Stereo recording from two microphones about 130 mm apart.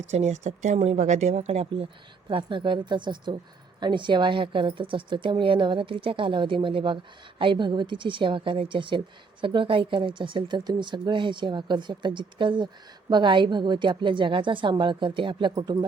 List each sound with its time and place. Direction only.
0.0 s a woman's voice: 55° right (ahead or behind); by 15.9 s 30° right (ahead or behind)